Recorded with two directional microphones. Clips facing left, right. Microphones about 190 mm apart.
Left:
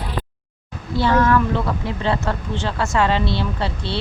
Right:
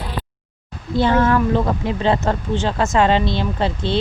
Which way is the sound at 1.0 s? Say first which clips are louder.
Right 1 dB; 25° right (ahead or behind).